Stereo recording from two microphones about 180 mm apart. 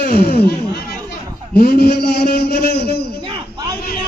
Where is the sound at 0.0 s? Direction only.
55° left (ahead or behind).